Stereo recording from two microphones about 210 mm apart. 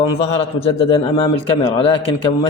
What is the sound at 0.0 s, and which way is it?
A man's voice, 25° left (ahead or behind).